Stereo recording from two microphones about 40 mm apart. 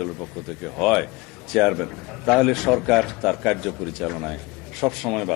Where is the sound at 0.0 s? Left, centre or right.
Centre.